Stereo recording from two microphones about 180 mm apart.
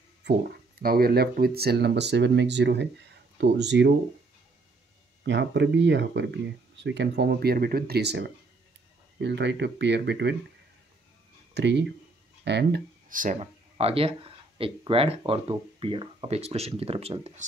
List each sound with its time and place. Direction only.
0.2 s speech: 60° right (ahead or behind); by 3.9 s 75° right (ahead or behind)
5.2 s speech: 75° right (ahead or behind)
11.5 s speech: 75° right (ahead or behind)
13.1 s speech: 45° right (ahead or behind)
13.4 s speech: 30° right (ahead or behind)